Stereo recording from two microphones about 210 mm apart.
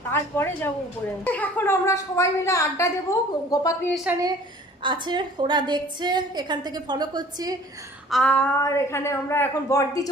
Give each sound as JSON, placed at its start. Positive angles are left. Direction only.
{"t": 0.1, "sound": "a woman's voice", "side_deg": 10}
{"t": 4.8, "sound": "a woman's voice", "side_deg": -20}
{"t": 8.1, "sound": "a woman's voice", "side_deg": 5}